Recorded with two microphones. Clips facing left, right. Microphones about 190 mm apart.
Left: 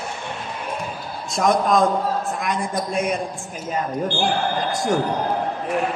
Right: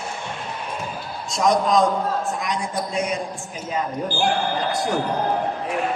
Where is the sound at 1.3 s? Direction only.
55° left (ahead or behind).